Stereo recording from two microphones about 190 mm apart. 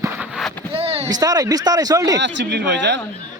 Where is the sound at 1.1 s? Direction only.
20° right (ahead or behind).